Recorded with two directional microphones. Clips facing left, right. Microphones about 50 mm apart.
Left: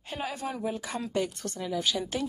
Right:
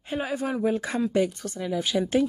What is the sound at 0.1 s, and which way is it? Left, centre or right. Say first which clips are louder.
Speech: right 6 dB; right.